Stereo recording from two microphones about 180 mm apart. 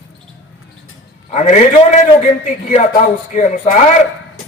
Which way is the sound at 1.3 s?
40° left (ahead or behind).